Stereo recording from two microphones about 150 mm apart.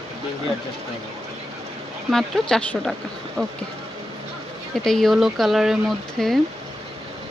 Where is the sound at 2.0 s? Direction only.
Centre (ahead or behind).